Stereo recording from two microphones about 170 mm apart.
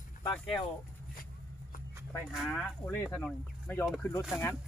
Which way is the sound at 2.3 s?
Centre (ahead or behind).